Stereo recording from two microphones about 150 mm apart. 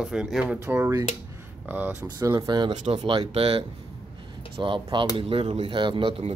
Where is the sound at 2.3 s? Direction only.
30° right (ahead or behind).